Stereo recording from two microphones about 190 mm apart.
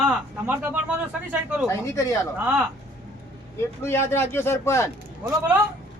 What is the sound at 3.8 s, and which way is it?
Speech, 15° left (ahead or behind).